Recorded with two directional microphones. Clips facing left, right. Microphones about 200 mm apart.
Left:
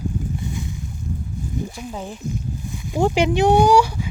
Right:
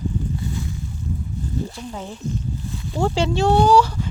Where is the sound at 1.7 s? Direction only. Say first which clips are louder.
Left 1 dB; 10° left (ahead or behind).